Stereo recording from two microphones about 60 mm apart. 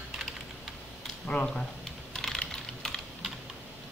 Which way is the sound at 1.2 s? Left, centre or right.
Centre.